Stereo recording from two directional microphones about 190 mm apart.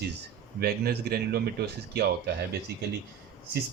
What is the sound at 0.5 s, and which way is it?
Speech, 55° right (ahead or behind).